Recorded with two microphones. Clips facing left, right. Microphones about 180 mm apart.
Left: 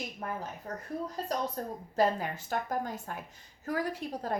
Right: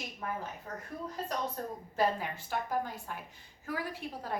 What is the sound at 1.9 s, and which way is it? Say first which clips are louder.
A woman's voice: left 3 dB; 40° left (ahead or behind).